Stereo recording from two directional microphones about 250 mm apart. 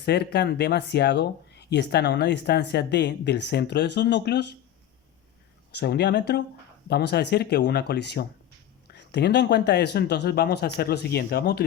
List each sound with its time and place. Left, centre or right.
0.0 s speech: left
5.7 s speech: left